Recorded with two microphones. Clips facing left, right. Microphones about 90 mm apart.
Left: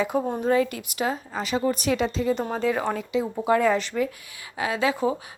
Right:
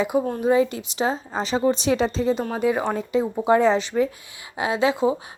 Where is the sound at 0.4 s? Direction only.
20° right (ahead or behind).